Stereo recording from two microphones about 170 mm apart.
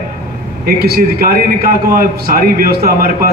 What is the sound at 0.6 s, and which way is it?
A man's voice, 65° right (ahead or behind).